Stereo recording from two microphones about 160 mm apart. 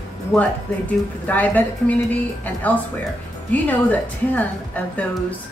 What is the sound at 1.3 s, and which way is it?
A woman's voice, 10° left (ahead or behind).